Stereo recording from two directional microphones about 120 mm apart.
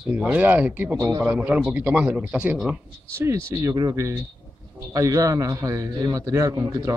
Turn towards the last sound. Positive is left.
turn(degrees=-25)  # may be behind; listen again after turning